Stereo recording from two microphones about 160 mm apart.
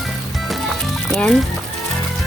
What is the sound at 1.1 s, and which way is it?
Speech, 5° left (ahead or behind).